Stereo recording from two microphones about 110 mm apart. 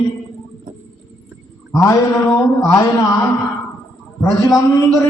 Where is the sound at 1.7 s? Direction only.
30° left (ahead or behind).